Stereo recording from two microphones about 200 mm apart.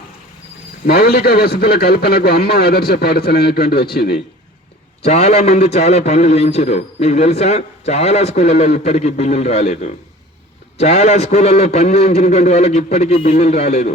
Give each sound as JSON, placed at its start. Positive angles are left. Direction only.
{"t": 0.9, "sound": "a man's voice", "side_deg": 50}
{"t": 5.0, "sound": "a man's voice", "side_deg": 35}